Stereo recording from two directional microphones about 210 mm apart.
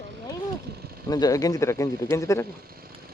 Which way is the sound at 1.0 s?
15° left (ahead or behind).